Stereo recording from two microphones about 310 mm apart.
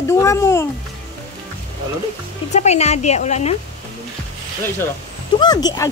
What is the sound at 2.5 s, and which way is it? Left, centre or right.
A woman's voice, left.